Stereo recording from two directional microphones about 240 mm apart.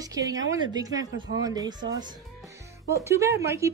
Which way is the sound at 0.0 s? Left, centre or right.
Centre.